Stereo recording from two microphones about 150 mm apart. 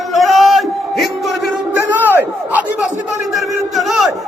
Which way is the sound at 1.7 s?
10° right (ahead or behind).